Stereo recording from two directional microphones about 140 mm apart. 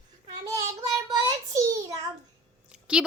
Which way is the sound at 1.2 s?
25° right (ahead or behind).